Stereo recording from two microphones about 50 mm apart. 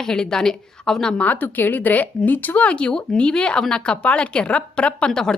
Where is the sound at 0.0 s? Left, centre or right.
Centre.